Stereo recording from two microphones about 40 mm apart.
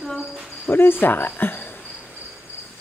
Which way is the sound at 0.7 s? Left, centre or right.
Left.